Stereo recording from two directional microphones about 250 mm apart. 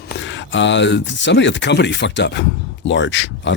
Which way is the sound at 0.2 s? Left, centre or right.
Left.